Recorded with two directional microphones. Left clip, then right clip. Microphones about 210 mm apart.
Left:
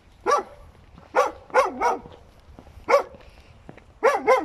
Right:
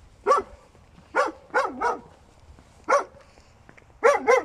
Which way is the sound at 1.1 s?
15° left (ahead or behind).